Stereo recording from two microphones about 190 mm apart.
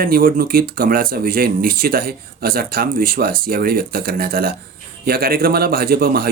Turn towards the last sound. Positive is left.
turn(degrees=-50)  # may be behind; listen again after turning